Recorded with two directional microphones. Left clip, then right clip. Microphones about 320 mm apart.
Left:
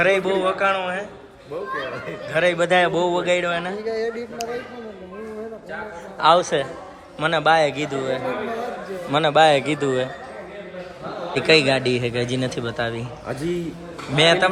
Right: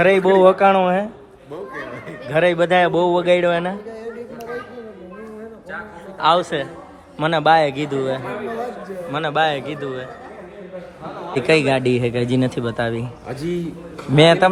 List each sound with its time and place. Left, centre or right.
0.0 s speech: centre
2.3 s a man's voice: centre
3.8 s speech: left
6.1 s a man's voice: centre
11.3 s a man's voice: centre